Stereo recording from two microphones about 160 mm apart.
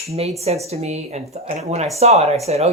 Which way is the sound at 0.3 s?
40° right (ahead or behind).